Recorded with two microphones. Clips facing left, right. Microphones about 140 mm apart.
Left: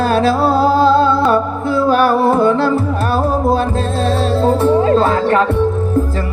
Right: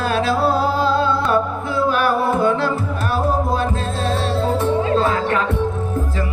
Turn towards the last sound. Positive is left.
turn(degrees=35)  # may be behind; listen again after turning